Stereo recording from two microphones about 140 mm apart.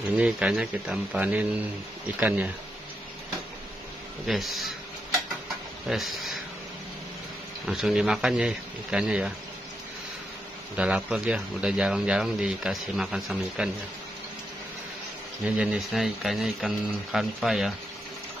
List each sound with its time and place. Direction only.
0.2 s speech: 10° right (ahead or behind)
4.3 s speech: centre (ahead or behind)
5.9 s speech: centre (ahead or behind)
7.6 s speech: 5° right (ahead or behind)
10.8 s speech: 10° right (ahead or behind)
15.4 s speech: 10° right (ahead or behind)